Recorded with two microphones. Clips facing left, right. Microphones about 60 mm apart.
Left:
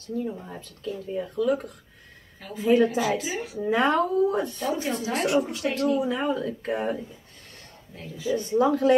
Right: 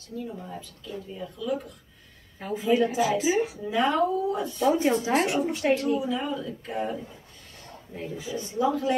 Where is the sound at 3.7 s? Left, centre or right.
Left.